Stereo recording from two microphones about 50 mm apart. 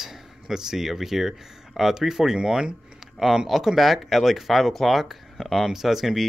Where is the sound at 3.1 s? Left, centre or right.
Centre.